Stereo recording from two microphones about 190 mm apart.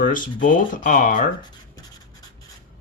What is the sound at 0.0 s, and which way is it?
Speech, 45° left (ahead or behind).